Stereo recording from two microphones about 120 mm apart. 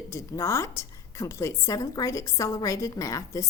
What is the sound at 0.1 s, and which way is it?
A woman's voice, 25° left (ahead or behind).